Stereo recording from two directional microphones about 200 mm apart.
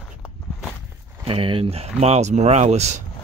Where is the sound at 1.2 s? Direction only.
25° right (ahead or behind).